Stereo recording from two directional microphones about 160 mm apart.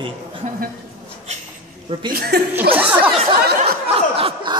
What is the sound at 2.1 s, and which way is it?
Speech, 80° right.